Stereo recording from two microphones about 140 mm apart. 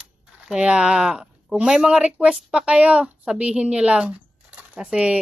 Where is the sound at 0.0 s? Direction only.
5° right (ahead or behind).